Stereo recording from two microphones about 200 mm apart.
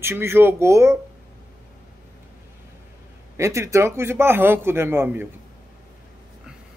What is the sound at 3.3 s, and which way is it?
Speech, 15° right (ahead or behind).